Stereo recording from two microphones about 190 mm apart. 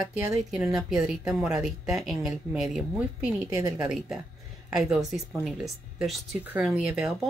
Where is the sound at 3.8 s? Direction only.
Centre (ahead or behind).